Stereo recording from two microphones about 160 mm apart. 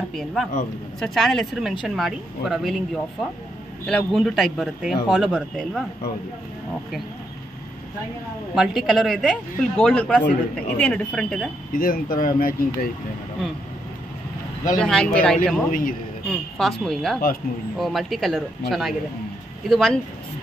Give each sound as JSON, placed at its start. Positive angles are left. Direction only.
{"t": 0.1, "sound": "speech", "side_deg": 0}
{"t": 8.5, "sound": "speech", "side_deg": -5}
{"t": 11.7, "sound": "speech", "side_deg": 60}
{"t": 14.8, "sound": "speech", "side_deg": 5}
{"t": 15.7, "sound": "speech", "side_deg": 60}
{"t": 16.3, "sound": "speech", "side_deg": 5}